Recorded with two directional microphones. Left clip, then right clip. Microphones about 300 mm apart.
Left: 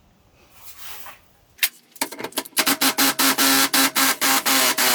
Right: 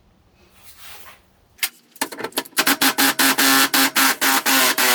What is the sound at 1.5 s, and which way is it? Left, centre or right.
Tick-tock, centre.